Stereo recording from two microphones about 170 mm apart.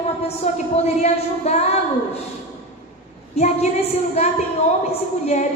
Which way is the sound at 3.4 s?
40° left (ahead or behind).